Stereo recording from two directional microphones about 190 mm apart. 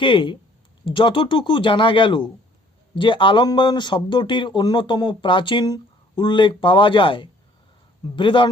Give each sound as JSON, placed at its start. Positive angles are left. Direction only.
{"t": 0.0, "sound": "speech", "side_deg": 25}